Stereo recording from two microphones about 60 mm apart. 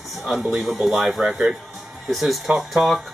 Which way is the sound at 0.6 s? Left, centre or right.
Centre.